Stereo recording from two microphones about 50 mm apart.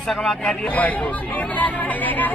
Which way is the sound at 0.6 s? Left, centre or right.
Left.